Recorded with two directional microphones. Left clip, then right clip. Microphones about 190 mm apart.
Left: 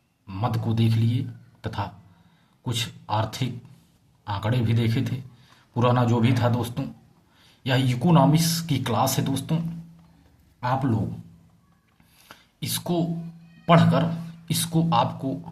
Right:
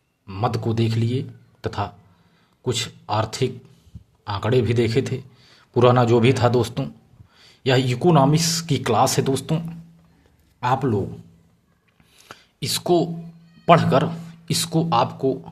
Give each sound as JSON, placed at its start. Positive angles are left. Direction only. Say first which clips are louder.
{"t": 0.3, "sound": "a man's voice", "louder": "right 5 dB", "side_deg": -35}
{"t": 12.1, "sound": "a sound", "louder": "right 5 dB", "side_deg": -40}
{"t": 13.7, "sound": "speech", "louder": "right 5 dB", "side_deg": -40}